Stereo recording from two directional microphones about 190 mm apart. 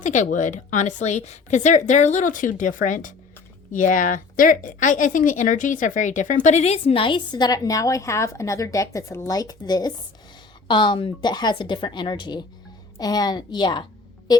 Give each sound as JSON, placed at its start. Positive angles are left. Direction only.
{"t": 0.0, "sound": "a woman's voice", "side_deg": 40}